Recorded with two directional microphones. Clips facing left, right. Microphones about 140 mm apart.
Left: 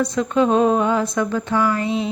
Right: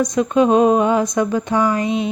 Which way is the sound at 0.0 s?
15° right (ahead or behind).